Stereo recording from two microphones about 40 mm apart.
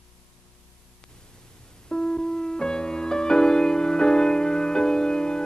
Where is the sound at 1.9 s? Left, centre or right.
Centre.